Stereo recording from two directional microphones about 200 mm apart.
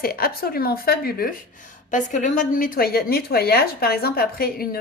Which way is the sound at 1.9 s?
40° left (ahead or behind).